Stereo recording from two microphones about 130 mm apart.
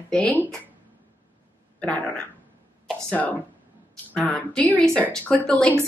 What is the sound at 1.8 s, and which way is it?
A woman's voice, 10° left (ahead or behind).